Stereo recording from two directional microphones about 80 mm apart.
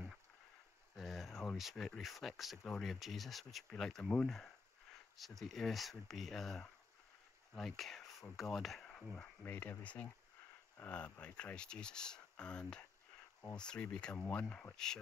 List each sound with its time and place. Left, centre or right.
0.9 s a sound: centre
1.6 s speech: centre
9.1 s speech: centre